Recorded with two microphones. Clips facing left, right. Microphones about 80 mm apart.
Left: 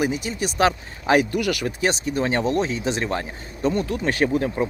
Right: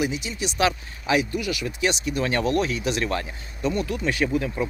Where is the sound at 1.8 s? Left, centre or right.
Left.